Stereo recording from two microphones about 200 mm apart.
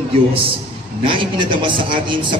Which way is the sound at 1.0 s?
25° right (ahead or behind).